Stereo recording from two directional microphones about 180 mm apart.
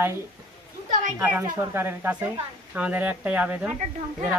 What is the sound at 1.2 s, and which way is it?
Speech, 15° right (ahead or behind).